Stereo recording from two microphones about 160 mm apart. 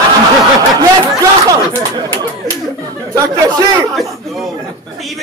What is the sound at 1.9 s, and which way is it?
Speech, 25° right (ahead or behind).